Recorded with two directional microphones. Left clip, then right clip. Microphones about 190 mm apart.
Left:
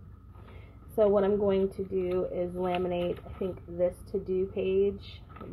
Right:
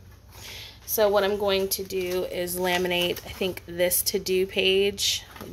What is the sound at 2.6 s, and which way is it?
Speech, 20° right (ahead or behind).